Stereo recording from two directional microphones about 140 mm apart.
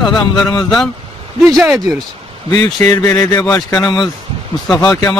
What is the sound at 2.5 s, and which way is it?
Speech, 25° left (ahead or behind).